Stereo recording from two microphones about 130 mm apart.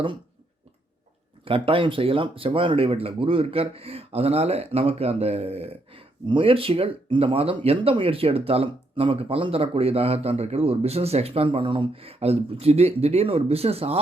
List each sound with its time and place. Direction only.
1.5 s speech: 45° right (ahead or behind)